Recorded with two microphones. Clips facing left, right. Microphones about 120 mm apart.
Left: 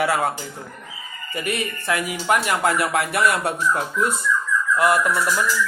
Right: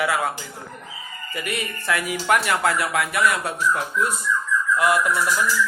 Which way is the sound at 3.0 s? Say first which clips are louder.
Left 2 dB; 45° left (ahead or behind).